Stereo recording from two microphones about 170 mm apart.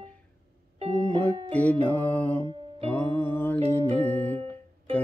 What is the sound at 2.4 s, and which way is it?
Music, 30° right (ahead or behind).